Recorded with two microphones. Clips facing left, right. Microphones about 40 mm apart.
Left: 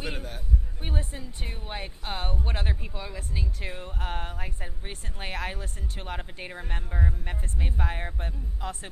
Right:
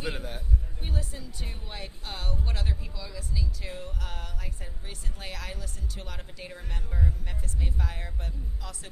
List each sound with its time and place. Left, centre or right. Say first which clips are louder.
0.0 s a man's voice: right 1 dB; centre
0.8 s speech: left 2 dB; left